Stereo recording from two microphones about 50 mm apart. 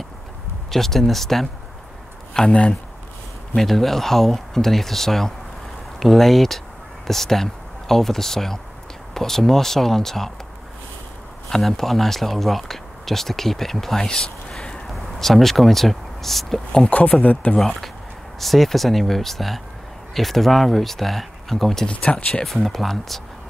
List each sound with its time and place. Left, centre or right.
0.7 s speech: centre
2.3 s speech: centre
3.5 s speech: centre
11.4 s speech: centre
14.9 s speech: centre
16.9 s speech: left
17.6 s speech: centre
21.8 s speech: left
22.4 s speech: centre